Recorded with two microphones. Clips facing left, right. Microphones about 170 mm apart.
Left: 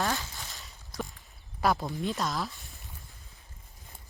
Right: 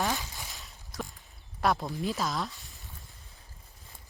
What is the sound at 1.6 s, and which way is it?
Speech, centre (ahead or behind).